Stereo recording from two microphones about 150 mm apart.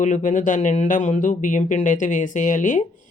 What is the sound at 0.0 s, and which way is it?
Speech, 55° left (ahead or behind).